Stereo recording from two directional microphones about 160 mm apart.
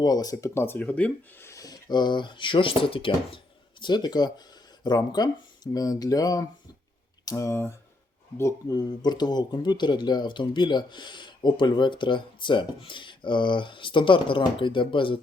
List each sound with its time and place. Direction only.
0.0 s speech: 25° left (ahead or behind)